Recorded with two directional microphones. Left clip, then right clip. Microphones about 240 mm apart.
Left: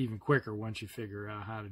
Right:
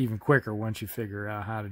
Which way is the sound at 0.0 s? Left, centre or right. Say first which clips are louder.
Right 6 dB; right.